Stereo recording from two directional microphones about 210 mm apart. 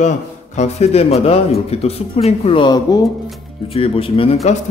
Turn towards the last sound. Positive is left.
turn(degrees=25)  # may be behind; listen again after turning